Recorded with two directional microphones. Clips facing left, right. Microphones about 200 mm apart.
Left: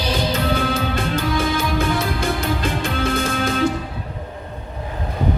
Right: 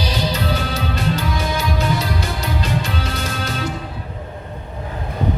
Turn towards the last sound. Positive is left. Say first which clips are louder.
# left 5 dB
turn(degrees=50)  # may be behind; listen again after turning